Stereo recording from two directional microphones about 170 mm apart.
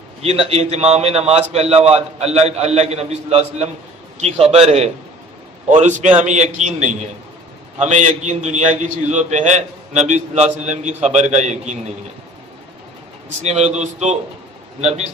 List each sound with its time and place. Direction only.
0.2 s a man's voice: 35° right (ahead or behind)
13.4 s a man's voice: 40° right (ahead or behind)